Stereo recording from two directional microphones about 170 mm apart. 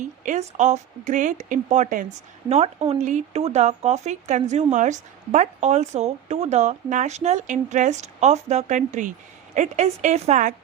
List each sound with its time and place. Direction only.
0.0 s speech: 45° right (ahead or behind)
2.5 s speech: 40° right (ahead or behind)